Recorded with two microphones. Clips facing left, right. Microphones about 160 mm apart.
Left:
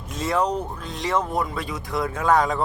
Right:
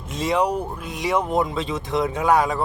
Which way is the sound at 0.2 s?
15° right (ahead or behind).